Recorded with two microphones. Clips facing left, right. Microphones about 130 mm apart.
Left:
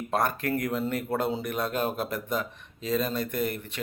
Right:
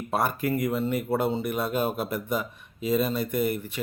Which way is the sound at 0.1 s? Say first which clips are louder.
Right 1 dB; 5° right (ahead or behind).